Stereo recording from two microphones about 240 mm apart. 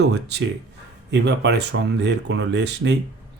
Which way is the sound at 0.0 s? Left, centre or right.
Right.